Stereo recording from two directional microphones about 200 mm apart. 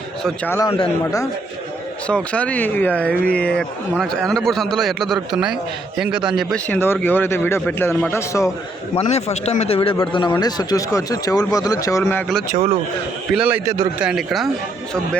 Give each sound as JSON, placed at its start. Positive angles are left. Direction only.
{"t": 0.2, "sound": "a man's voice", "side_deg": 0}
{"t": 2.0, "sound": "a man's voice", "side_deg": 5}
{"t": 9.0, "sound": "a man's voice", "side_deg": 30}
{"t": 12.5, "sound": "a man's voice", "side_deg": -30}
{"t": 13.3, "sound": "a man's voice", "side_deg": -5}